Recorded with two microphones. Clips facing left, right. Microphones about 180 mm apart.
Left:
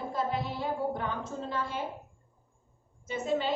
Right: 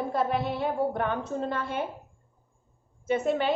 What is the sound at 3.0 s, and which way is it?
Speech, 60° right (ahead or behind).